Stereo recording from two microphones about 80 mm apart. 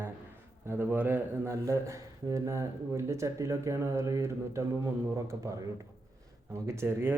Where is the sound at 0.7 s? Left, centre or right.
Right.